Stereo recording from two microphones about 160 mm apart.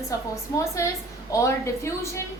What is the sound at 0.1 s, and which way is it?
Speech, 20° left (ahead or behind).